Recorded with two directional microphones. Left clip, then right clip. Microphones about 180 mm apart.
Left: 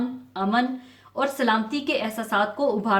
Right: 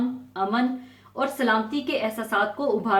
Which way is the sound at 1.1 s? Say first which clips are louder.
Left 1 dB; 45° left (ahead or behind).